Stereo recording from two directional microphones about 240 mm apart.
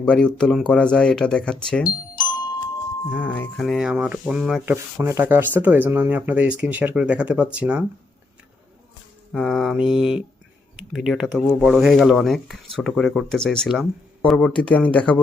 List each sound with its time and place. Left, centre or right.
0.0 s speech: centre
2.1 s music: centre
3.1 s speech: centre
9.3 s speech: centre